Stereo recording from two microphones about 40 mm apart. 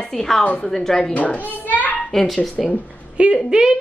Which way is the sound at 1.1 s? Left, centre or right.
Left.